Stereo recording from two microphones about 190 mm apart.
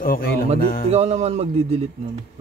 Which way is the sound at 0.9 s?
35° right (ahead or behind).